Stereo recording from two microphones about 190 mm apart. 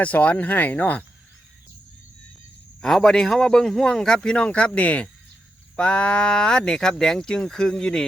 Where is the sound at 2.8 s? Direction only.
Centre (ahead or behind).